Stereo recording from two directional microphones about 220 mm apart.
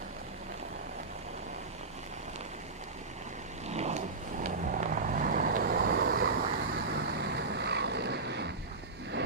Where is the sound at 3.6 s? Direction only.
30° right (ahead or behind).